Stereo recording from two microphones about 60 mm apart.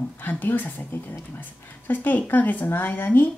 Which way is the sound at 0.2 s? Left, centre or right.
Left.